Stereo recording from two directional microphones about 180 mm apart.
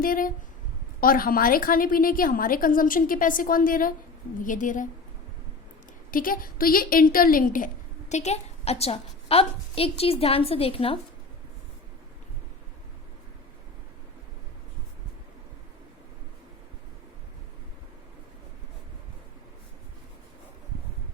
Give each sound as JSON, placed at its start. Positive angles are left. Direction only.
{"t": 0.0, "sound": "a woman's voice", "side_deg": 50}
{"t": 6.1, "sound": "a woman's voice", "side_deg": 50}
{"t": 8.1, "sound": "a woman's voice", "side_deg": 35}